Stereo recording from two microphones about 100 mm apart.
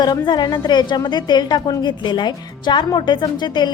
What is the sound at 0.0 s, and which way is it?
A woman's voice, 45° left (ahead or behind).